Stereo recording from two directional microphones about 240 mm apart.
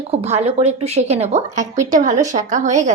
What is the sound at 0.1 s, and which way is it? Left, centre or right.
A woman's voice, right.